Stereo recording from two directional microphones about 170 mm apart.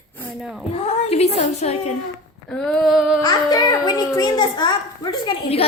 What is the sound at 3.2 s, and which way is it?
A child's voice, 25° left (ahead or behind).